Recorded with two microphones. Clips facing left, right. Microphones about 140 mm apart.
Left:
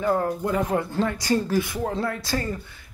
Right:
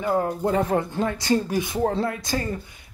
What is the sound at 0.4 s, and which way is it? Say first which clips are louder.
Speech: right 2 dB; 30° right (ahead or behind).